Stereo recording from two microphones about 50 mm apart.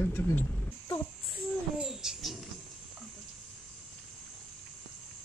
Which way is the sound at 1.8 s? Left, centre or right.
Centre.